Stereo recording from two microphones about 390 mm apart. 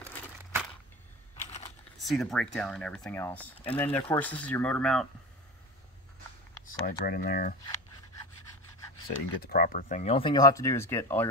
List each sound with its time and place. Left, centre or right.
2.0 s speech: centre
6.6 s speech: left
8.9 s speech: left; by 11.2 s centre